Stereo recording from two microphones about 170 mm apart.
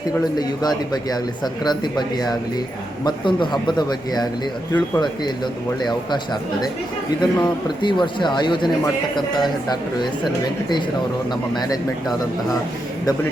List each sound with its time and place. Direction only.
0.3 s speech: 25° left (ahead or behind)
5.8 s speech: 25° left (ahead or behind)
7.3 s speech: 25° left (ahead or behind)